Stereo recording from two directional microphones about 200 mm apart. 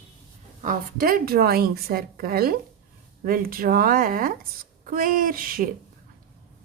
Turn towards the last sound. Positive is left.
turn(degrees=-45)  # may be behind; listen again after turning